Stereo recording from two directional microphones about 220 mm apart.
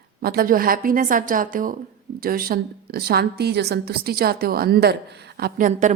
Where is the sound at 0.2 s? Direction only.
45° right (ahead or behind).